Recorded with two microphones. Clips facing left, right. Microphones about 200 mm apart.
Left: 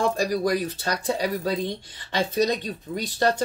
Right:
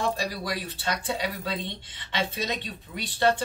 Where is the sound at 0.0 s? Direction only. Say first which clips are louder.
Left 6 dB; 45° left (ahead or behind).